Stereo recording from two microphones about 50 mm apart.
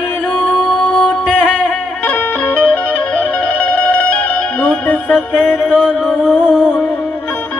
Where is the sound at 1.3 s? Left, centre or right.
Left.